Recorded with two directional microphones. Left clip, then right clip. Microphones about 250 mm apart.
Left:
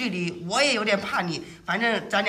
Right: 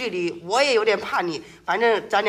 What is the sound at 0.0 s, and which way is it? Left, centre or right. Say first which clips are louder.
A man's voice: right 4 dB; centre.